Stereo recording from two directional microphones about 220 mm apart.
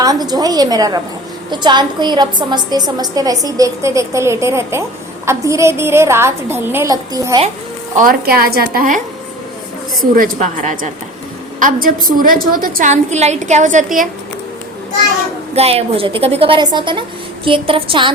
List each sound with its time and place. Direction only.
0.0 s a woman's voice: 15° right (ahead or behind)
7.9 s a woman's voice: 40° right (ahead or behind)
10.2 s a woman's voice: 35° right (ahead or behind)
15.5 s a woman's voice: 25° right (ahead or behind)